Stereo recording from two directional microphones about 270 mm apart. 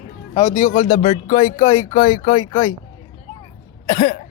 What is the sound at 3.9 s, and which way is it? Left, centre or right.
Speech, left.